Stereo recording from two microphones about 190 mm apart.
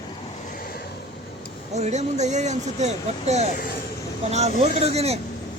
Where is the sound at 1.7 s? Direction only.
35° right (ahead or behind).